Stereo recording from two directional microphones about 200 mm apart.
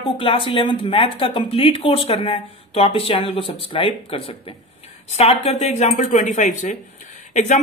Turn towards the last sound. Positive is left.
turn(degrees=35)  # may be behind; listen again after turning